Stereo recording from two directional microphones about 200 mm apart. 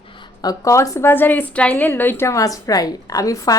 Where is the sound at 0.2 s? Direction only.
15° left (ahead or behind).